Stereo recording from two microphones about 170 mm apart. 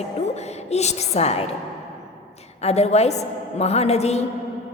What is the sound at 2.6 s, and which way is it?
Speech, 40° left (ahead or behind).